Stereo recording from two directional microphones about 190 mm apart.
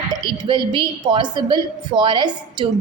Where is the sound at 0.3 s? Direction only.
25° right (ahead or behind).